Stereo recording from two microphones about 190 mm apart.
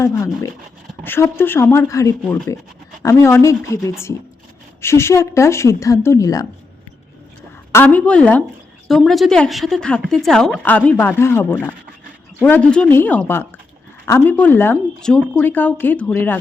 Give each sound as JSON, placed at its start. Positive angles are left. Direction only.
{"t": 0.0, "sound": "speech", "side_deg": 15}
{"t": 7.7, "sound": "speech", "side_deg": 10}